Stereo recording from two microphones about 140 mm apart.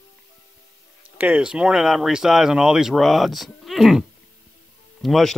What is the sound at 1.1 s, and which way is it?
Speech, 10° right (ahead or behind).